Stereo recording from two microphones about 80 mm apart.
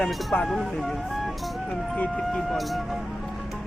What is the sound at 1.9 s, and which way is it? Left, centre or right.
Speech, centre.